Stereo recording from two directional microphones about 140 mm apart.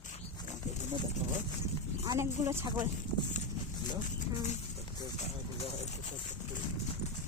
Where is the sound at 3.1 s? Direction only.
35° left (ahead or behind).